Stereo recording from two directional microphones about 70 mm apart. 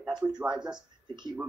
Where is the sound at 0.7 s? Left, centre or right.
Right.